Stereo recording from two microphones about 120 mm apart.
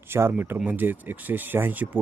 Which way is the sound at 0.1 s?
20° right (ahead or behind).